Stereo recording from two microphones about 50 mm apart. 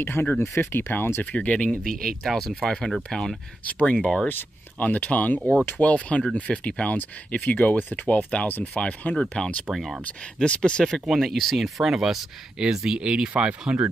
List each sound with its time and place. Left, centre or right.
0.0 s speech: left
1.2 s speech: left
1.8 s speech: centre
3.6 s speech: left
4.3 s speech: left
4.8 s speech: left
9.2 s speech: centre
9.7 s speech: centre
10.0 s speech: left
11.1 s speech: centre; by 13.8 s right